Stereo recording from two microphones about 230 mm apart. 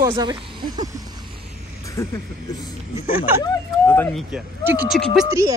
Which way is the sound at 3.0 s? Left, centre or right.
Left.